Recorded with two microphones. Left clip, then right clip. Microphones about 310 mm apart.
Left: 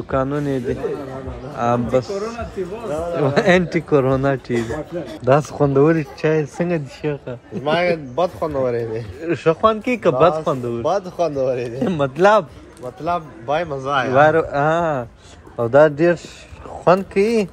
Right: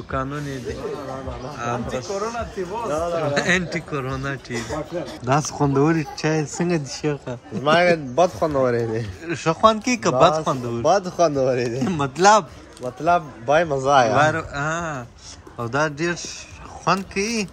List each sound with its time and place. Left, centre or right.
0.1 s speech: centre
7.6 s a man's voice: right
9.2 s speech: centre
10.8 s speech: right
11.8 s speech: centre
12.8 s speech: right
14.1 s speech: centre